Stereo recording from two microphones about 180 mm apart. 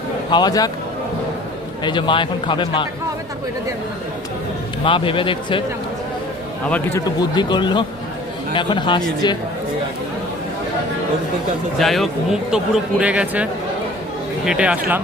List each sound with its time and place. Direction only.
0.3 s a man's voice: 25° left (ahead or behind)
1.8 s a man's voice: 25° left (ahead or behind)
4.8 s a man's voice: 30° left (ahead or behind)
6.7 s a man's voice: 10° left (ahead or behind)
7.3 s a man's voice: 25° left (ahead or behind)
11.8 s speech: centre (ahead or behind)